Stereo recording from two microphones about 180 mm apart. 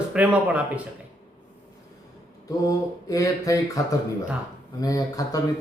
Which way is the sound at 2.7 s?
20° left (ahead or behind).